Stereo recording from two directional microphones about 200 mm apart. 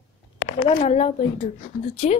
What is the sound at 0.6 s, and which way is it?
Speech, 30° left (ahead or behind).